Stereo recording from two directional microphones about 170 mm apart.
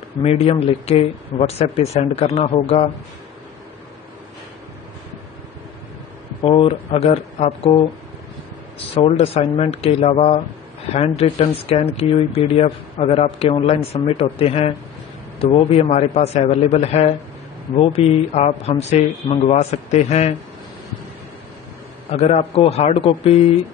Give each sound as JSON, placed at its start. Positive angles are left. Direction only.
{"t": 0.2, "sound": "speech", "side_deg": 35}
{"t": 6.4, "sound": "speech", "side_deg": 35}
{"t": 8.9, "sound": "speech", "side_deg": 35}
{"t": 22.1, "sound": "speech", "side_deg": 35}